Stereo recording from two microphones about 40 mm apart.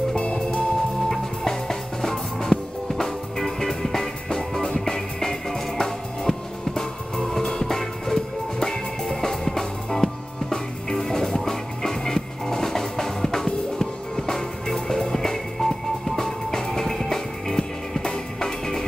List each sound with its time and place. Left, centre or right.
0.1 s music: left
1.0 s music: centre